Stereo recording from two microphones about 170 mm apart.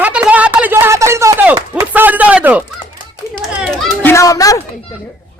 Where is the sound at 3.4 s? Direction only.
Centre (ahead or behind).